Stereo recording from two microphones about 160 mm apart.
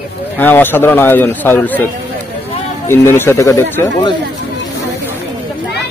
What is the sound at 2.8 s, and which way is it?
A man's voice, 15° left (ahead or behind).